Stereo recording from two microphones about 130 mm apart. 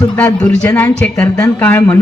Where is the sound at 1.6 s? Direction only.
15° left (ahead or behind).